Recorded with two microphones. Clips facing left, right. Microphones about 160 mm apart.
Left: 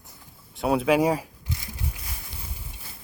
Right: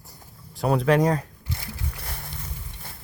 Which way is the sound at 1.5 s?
60° right (ahead or behind).